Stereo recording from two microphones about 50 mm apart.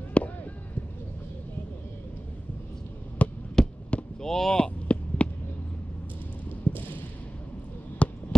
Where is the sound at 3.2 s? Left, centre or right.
Left.